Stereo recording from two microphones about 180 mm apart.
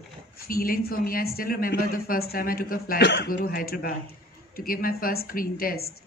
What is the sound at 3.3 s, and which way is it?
Speech, 55° left (ahead or behind).